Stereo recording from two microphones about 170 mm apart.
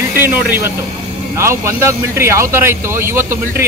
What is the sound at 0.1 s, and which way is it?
A man's voice, 10° right (ahead or behind).